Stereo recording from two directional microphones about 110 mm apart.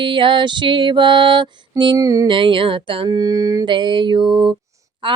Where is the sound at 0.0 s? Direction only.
50° right (ahead or behind); by 2.2 s 35° right (ahead or behind).